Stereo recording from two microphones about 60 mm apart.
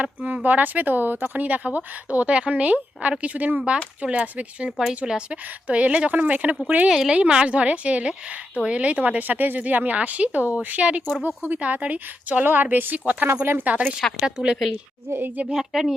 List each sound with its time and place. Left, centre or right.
0.0 s speech: right
6.9 s speech: centre; by 13.2 s right
13.2 s speech: right
13.8 s speech: centre
14.3 s speech: centre
15.1 s a woman's voice: right
15.5 s speech: centre